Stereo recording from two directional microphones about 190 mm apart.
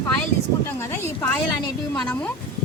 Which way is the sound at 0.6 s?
15° left (ahead or behind).